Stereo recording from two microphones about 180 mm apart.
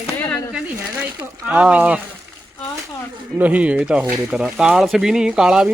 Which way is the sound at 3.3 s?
10° right (ahead or behind).